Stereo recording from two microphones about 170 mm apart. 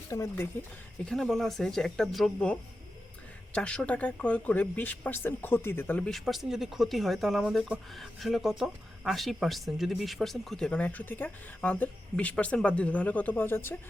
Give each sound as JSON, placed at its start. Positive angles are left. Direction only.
{"t": 0.1, "sound": "speech", "side_deg": 20}
{"t": 1.0, "sound": "speech", "side_deg": 0}